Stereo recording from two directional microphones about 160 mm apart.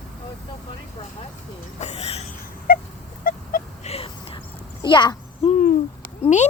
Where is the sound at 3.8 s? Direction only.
40° left (ahead or behind).